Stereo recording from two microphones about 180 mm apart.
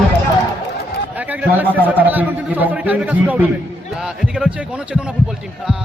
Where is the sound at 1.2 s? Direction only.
10° right (ahead or behind).